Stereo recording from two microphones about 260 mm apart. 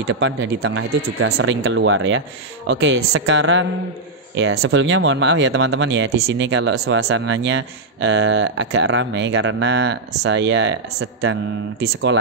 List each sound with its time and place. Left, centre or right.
0.1 s speech: right